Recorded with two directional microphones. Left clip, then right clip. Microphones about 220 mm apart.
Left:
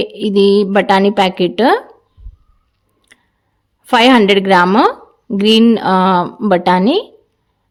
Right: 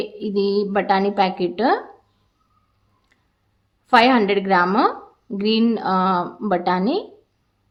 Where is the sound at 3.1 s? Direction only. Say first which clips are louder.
Left 16 dB; 45° left (ahead or behind).